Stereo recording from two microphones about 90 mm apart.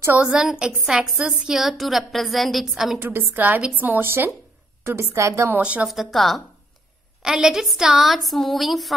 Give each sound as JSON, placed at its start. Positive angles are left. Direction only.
{"t": 0.2, "sound": "a woman's voice", "side_deg": -5}
{"t": 3.0, "sound": "a woman's voice", "side_deg": -25}
{"t": 5.6, "sound": "a woman's voice", "side_deg": -15}
{"t": 5.9, "sound": "a woman's voice", "side_deg": 0}